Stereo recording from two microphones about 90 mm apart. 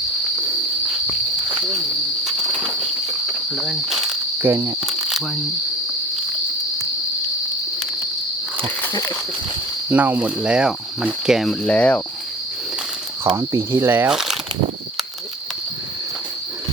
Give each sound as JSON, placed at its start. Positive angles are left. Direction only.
{"t": 3.5, "sound": "insect", "side_deg": 0}
{"t": 4.4, "sound": "insect", "side_deg": -25}
{"t": 4.8, "sound": "cricket", "side_deg": -5}
{"t": 8.8, "sound": "a sound", "side_deg": 30}
{"t": 9.9, "sound": "speech", "side_deg": -20}
{"t": 11.6, "sound": "speech", "side_deg": 15}
{"t": 13.3, "sound": "speech", "side_deg": -35}
{"t": 14.1, "sound": "speech", "side_deg": -5}